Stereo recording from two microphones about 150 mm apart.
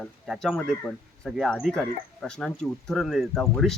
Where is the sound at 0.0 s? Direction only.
Centre (ahead or behind).